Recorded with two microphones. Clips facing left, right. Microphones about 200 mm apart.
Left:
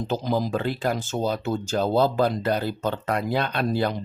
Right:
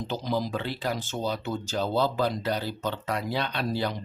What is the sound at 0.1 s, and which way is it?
Speech, 45° left (ahead or behind).